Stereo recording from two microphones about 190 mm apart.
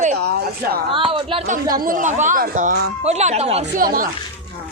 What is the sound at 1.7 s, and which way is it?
Speech, 45° right (ahead or behind).